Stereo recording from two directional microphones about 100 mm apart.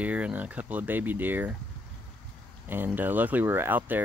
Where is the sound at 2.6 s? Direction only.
20° right (ahead or behind).